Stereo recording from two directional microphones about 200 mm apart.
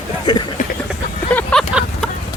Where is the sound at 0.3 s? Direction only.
20° left (ahead or behind).